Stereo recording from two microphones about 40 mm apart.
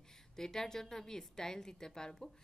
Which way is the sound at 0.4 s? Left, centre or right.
Centre.